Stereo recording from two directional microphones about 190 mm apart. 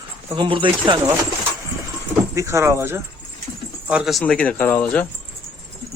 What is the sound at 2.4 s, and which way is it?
Speech, 15° right (ahead or behind).